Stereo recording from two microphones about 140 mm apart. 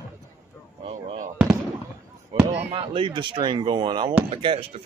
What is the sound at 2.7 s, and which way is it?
Speech, 40° right (ahead or behind).